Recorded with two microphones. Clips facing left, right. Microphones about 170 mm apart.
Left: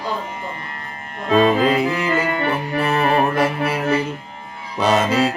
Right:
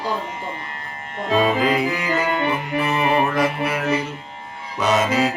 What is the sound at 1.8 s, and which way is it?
Music, 15° right (ahead or behind).